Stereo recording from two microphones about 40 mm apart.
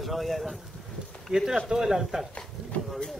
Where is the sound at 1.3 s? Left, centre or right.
Centre.